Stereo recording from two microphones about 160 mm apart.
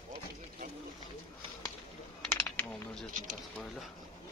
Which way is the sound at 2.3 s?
15° left (ahead or behind).